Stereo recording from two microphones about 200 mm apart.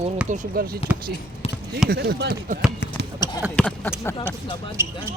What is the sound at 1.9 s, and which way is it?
Speech, 50° right (ahead or behind).